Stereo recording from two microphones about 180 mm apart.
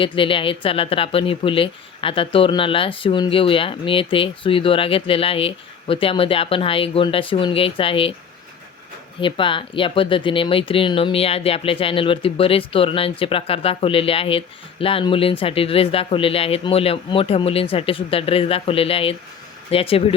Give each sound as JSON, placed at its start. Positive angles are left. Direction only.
{"t": 0.0, "sound": "speech", "side_deg": 30}
{"t": 9.2, "sound": "speech", "side_deg": 30}